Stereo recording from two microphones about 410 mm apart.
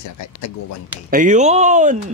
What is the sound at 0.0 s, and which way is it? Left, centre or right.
Speech, left.